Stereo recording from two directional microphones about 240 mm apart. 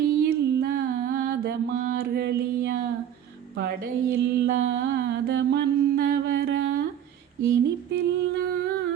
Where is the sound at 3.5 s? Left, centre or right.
Right.